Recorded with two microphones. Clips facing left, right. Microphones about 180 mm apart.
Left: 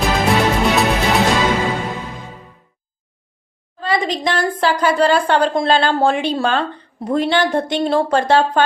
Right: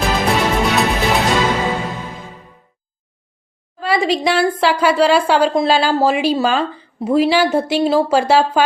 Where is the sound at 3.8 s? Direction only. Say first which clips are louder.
Right 2 dB; 5° right (ahead or behind).